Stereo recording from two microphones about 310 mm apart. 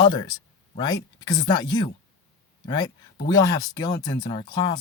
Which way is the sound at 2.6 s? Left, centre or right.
Centre.